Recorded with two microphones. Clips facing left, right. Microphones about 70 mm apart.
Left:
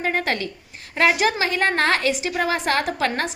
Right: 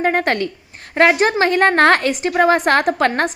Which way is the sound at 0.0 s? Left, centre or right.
Right.